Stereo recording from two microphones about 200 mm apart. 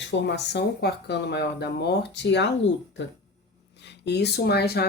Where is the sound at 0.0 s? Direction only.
60° left (ahead or behind).